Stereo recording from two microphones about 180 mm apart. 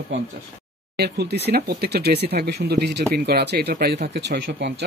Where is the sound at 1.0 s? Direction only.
65° right (ahead or behind).